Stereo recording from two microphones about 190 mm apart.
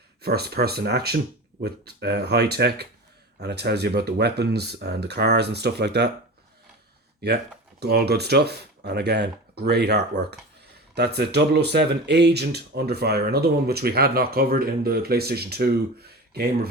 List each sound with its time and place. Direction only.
0.2 s speech: 55° right (ahead or behind)
7.2 s speech: 60° right (ahead or behind)